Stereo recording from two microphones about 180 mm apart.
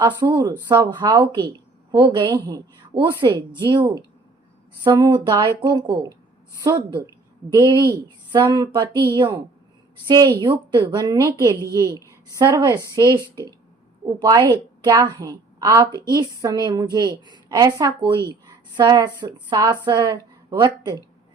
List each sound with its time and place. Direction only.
0.2 s a woman's voice: 20° right (ahead or behind)
14.2 s a woman's voice: 20° right (ahead or behind)